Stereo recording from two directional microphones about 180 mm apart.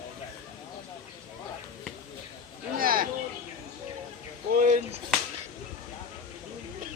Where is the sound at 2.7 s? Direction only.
55° right (ahead or behind).